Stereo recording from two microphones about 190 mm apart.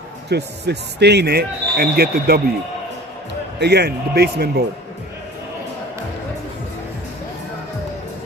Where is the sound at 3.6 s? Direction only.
60° right (ahead or behind).